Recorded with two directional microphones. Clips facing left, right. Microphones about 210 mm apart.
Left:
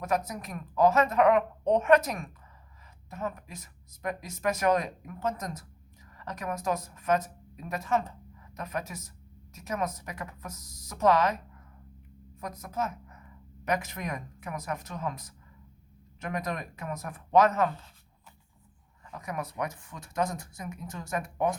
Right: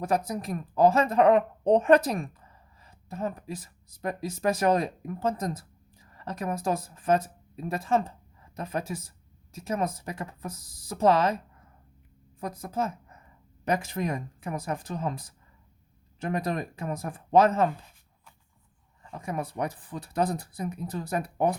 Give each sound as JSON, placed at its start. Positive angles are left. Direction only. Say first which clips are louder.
{"t": 0.0, "sound": "speech", "louder": "right 3 dB", "side_deg": -30}
{"t": 12.4, "sound": "speech", "louder": "right 3 dB", "side_deg": -30}
{"t": 19.0, "sound": "speech", "louder": "right 3 dB", "side_deg": -30}